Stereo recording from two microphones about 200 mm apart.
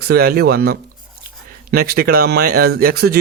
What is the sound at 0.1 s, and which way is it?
A man's voice, 50° right (ahead or behind).